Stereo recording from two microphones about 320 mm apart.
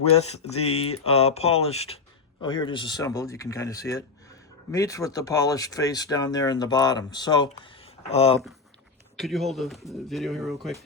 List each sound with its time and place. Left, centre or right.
0.0 s speech: centre
9.1 s speech: centre